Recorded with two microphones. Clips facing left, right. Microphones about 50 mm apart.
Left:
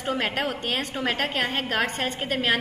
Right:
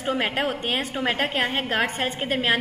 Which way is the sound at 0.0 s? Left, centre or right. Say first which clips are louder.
Right 2 dB; centre.